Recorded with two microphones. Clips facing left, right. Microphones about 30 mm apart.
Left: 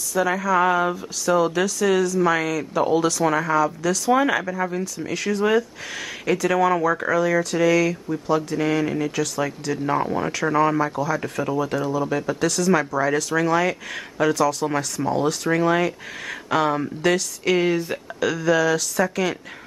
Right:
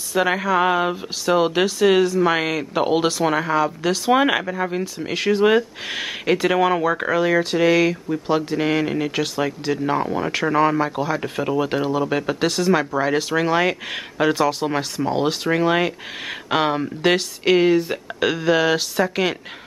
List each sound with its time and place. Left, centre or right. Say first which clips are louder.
0.1 s speech: right 1 dB; right
3.1 s speech: right 1 dB; right
10.4 s speech: right 1 dB; centre
10.8 s speech: right 1 dB; right
17.6 s speech: right 5 dB; centre
18.2 s speech: right 1 dB; right